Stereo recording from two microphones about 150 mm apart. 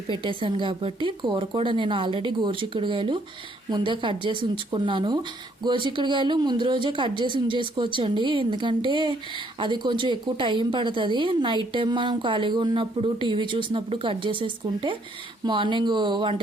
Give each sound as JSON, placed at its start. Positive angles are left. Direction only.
{"t": 0.1, "sound": "speech", "side_deg": -35}